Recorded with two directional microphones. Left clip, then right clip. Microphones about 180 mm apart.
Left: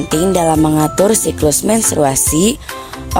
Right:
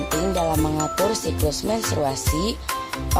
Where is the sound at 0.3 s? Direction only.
65° left (ahead or behind).